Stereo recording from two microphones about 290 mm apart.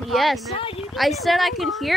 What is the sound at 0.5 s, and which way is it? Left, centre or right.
Speech, centre.